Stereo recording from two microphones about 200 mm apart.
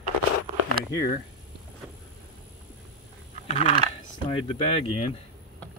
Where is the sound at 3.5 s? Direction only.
25° left (ahead or behind).